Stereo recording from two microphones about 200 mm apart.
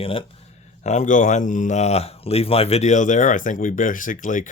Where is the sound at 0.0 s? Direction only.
30° left (ahead or behind).